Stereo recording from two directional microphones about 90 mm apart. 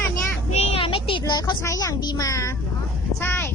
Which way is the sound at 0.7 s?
75° left (ahead or behind).